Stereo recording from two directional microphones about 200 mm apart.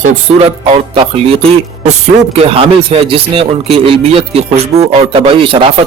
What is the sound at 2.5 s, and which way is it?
Speech, 30° right (ahead or behind).